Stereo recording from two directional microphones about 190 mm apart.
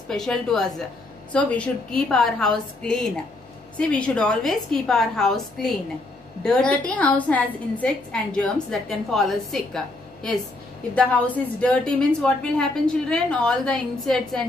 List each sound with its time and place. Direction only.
0.1 s a woman's voice: 5° left (ahead or behind)